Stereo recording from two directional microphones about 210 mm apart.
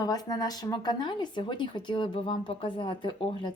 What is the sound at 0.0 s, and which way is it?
Speech, 20° left (ahead or behind).